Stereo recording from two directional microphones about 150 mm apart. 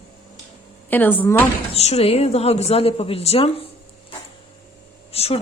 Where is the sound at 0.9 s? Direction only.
10° left (ahead or behind).